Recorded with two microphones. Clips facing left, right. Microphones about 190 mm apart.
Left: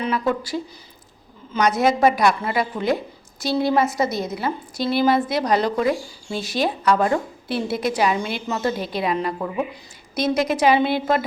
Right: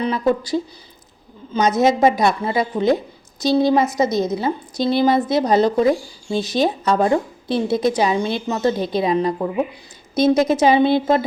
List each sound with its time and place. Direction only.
0.1 s a woman's voice: 25° right (ahead or behind)
6.4 s a woman's voice: 20° right (ahead or behind)